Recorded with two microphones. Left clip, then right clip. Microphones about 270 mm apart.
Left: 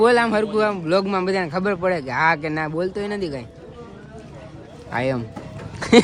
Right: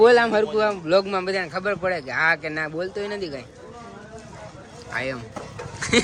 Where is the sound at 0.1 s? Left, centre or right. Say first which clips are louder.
Right 1 dB; left.